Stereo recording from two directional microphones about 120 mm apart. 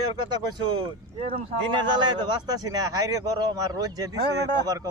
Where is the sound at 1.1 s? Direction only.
50° right (ahead or behind).